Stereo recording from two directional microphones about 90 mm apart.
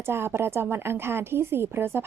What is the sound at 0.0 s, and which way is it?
A woman's voice, 25° right (ahead or behind).